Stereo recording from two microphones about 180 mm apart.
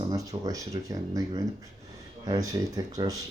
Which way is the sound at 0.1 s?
20° right (ahead or behind).